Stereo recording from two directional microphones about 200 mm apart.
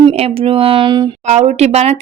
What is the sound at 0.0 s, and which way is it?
Speech, 30° right (ahead or behind).